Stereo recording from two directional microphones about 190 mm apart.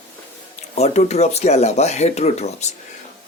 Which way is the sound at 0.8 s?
35° left (ahead or behind).